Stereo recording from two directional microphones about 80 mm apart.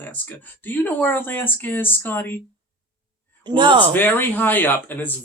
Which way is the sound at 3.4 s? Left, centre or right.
Right.